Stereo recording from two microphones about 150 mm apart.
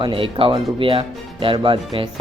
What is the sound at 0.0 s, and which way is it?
Speech, 35° right (ahead or behind).